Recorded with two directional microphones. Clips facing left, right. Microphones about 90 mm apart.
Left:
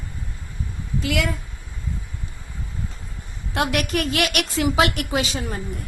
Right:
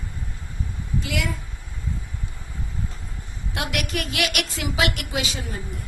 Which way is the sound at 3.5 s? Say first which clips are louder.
Left 5 dB; 40° left (ahead or behind).